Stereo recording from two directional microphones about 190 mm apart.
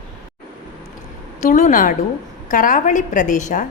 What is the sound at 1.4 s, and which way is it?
A woman's voice, 40° left (ahead or behind).